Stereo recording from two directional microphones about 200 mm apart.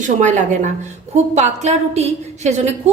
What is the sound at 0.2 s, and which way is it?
A woman's voice, 40° right (ahead or behind).